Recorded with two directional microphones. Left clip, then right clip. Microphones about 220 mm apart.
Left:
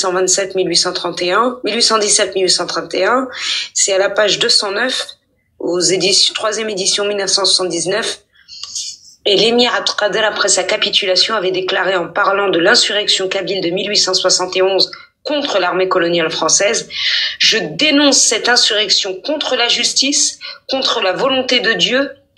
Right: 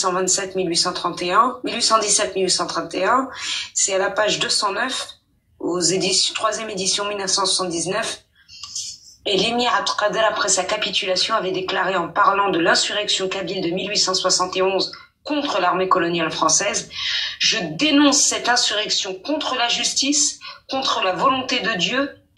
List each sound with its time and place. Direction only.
0.3 s speech: 20° left (ahead or behind)